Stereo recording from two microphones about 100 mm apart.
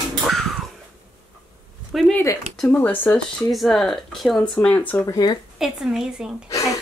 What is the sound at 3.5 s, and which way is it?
Speech, centre (ahead or behind).